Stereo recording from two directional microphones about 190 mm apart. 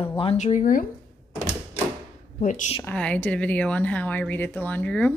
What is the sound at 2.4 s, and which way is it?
Speech, 40° left (ahead or behind).